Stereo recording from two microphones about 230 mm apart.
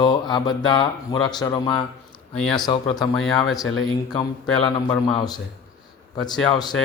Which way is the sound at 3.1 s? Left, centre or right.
Centre.